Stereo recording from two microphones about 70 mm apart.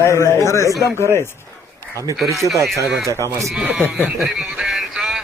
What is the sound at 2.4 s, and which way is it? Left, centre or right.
Speech, right.